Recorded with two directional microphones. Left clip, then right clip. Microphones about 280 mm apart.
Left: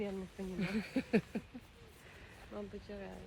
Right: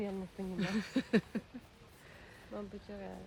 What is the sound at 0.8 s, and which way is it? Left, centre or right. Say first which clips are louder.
Speech: right 1 dB; centre.